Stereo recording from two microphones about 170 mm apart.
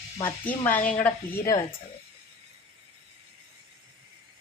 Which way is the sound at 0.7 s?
10° left (ahead or behind).